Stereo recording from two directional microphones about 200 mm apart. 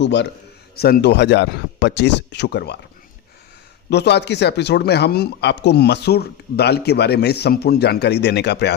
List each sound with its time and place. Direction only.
0.0 s speech: 60° left (ahead or behind)
3.8 s speech: 55° left (ahead or behind)